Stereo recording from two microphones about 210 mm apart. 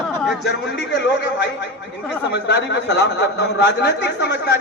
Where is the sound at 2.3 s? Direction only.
55° left (ahead or behind).